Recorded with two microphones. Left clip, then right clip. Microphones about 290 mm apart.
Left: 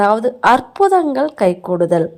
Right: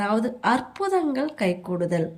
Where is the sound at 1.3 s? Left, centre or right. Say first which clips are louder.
Left 11 dB; left.